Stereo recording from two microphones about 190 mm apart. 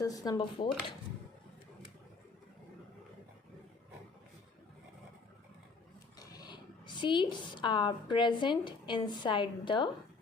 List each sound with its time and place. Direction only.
0.0 s speech: 20° left (ahead or behind)
6.1 s a woman's voice: 20° left (ahead or behind)